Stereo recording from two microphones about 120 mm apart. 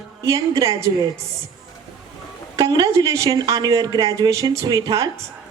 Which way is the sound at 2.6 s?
30° right (ahead or behind).